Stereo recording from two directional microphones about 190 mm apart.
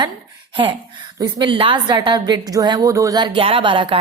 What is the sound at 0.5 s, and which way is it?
A woman's voice, 25° right (ahead or behind).